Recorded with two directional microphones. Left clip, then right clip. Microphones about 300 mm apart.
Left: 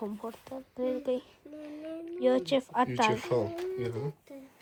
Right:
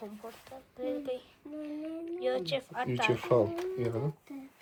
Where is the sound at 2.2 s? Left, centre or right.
Left.